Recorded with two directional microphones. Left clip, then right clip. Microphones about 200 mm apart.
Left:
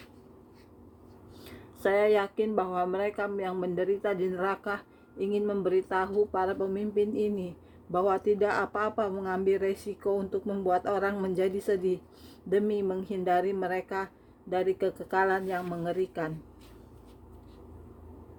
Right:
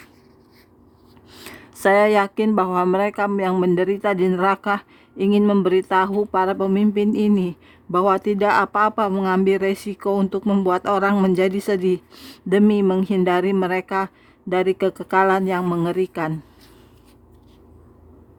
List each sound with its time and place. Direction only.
1.3 s speech: 40° right (ahead or behind)